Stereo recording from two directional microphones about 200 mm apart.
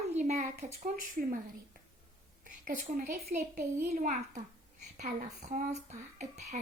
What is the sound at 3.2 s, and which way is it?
A child's voice, 45° right (ahead or behind).